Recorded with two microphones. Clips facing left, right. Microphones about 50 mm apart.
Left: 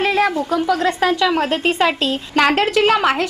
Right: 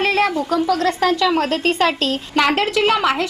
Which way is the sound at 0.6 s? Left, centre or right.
Centre.